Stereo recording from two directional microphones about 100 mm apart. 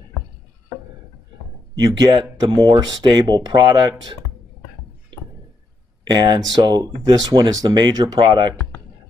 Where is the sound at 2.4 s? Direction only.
40° right (ahead or behind).